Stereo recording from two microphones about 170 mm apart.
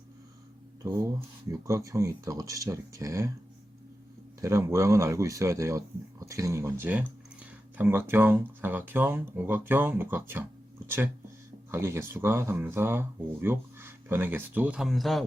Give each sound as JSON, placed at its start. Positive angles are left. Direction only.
{"t": 1.5, "sound": "speech", "side_deg": -20}
{"t": 4.4, "sound": "speech", "side_deg": -20}